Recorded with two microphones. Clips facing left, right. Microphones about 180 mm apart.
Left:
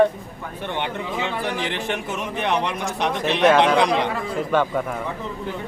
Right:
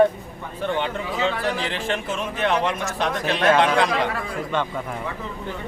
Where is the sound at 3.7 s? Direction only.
20° left (ahead or behind).